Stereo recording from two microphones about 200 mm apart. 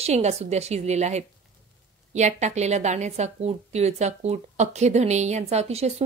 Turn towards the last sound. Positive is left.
turn(degrees=-30)  # may be behind; listen again after turning